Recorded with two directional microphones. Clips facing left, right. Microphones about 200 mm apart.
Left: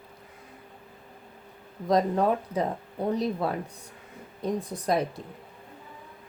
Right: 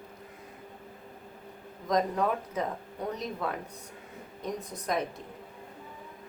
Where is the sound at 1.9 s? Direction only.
30° left (ahead or behind).